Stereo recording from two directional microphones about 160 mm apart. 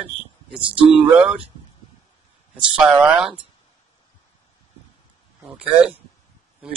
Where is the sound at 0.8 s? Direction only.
5° right (ahead or behind).